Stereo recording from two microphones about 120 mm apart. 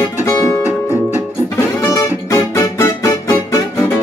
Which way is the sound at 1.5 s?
25° left (ahead or behind).